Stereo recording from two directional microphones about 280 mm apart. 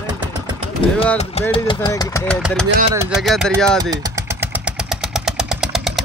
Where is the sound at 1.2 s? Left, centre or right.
Left.